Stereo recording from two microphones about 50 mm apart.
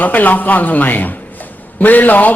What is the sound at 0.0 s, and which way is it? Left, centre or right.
A man's voice, left.